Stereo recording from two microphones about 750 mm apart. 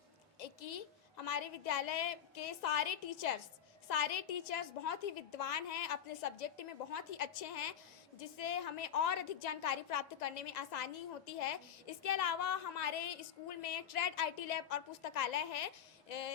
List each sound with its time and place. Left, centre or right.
0.3 s a woman's voice: left